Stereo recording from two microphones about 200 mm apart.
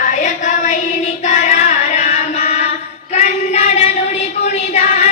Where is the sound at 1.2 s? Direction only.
35° left (ahead or behind).